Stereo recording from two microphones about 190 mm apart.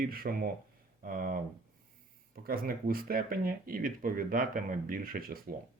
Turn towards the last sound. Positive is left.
turn(degrees=-50)  # may be behind; listen again after turning